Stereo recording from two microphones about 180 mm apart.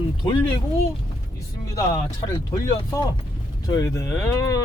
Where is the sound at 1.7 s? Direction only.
20° left (ahead or behind).